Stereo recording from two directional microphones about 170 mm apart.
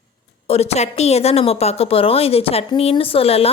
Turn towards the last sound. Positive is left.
turn(degrees=35)  # may be behind; listen again after turning